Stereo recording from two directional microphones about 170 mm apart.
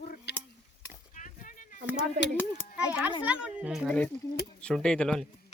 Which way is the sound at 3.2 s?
5° right (ahead or behind).